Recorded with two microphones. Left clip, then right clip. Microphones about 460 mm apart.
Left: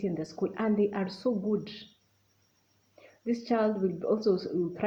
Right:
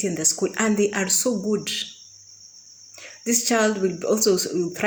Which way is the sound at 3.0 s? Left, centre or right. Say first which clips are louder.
Right 8 dB; left.